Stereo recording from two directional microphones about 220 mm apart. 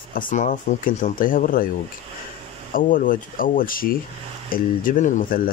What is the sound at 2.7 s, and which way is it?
Speech, 35° left (ahead or behind).